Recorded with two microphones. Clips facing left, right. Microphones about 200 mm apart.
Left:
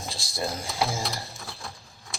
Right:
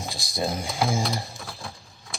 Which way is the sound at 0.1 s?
20° right (ahead or behind).